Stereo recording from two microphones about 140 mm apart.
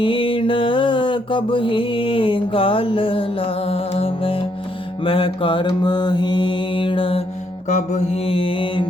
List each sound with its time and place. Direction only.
0.0 s mantra: 40° left (ahead or behind)
7.7 s mantra: 55° left (ahead or behind); by 8.9 s 35° left (ahead or behind)